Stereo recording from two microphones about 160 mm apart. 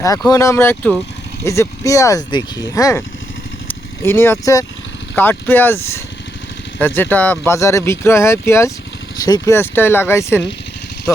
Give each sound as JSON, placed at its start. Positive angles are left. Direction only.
{"t": 0.3, "sound": "speech", "side_deg": 20}